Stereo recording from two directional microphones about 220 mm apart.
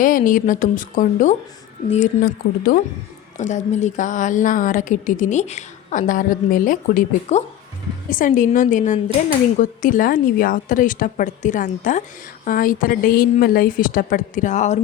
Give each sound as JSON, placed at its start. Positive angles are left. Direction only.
{"t": 0.0, "sound": "a woman's voice", "side_deg": 40}